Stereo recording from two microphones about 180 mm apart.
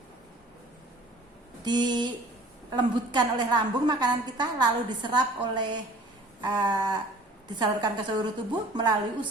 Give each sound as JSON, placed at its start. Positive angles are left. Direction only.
{"t": 1.6, "sound": "a woman's voice", "side_deg": -25}